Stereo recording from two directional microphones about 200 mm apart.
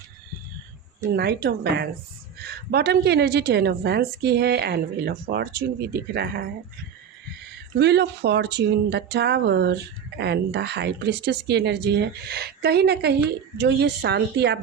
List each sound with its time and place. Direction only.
1.1 s a woman's voice: 50° right (ahead or behind)
7.8 s speech: 55° right (ahead or behind)